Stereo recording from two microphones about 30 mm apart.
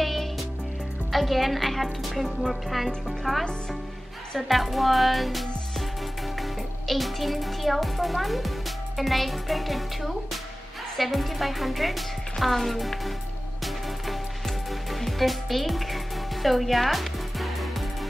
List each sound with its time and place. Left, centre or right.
0.0 s music: centre
1.1 s a child's voice: centre
3.3 s speech: centre
4.5 s music: centre
6.4 s a child's voice: centre
14.7 s music: centre